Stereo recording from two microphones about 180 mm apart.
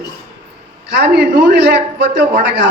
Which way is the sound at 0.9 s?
70° right (ahead or behind).